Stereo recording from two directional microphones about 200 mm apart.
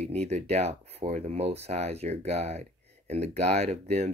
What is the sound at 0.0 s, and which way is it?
Speech, 35° right (ahead or behind).